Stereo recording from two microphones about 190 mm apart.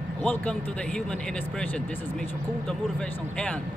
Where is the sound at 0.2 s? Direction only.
5° left (ahead or behind).